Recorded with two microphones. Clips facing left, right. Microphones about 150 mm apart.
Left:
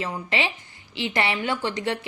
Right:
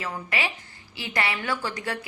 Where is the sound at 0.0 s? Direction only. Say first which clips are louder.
Left 3 dB; 25° left (ahead or behind).